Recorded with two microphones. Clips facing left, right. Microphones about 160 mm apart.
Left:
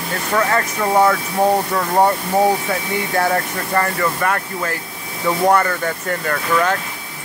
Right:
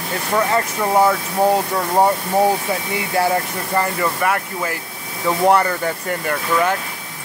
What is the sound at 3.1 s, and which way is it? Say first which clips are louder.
Speech: right 1 dB; 15° right (ahead or behind).